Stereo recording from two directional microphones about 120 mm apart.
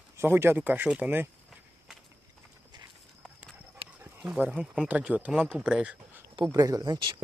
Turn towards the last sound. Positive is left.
turn(degrees=-35)  # may be behind; listen again after turning